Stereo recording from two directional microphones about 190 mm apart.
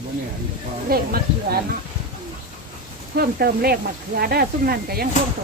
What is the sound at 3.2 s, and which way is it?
Speech, 55° right (ahead or behind).